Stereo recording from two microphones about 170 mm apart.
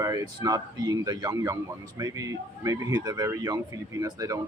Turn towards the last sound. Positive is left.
turn(degrees=-20)  # may be behind; listen again after turning